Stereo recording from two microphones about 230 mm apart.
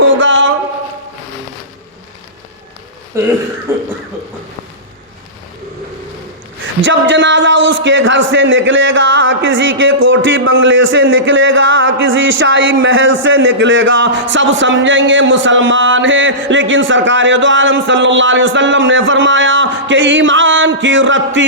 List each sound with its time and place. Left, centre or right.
0.0 s a sound: right
3.7 s cough: centre
6.8 s a man's voice: right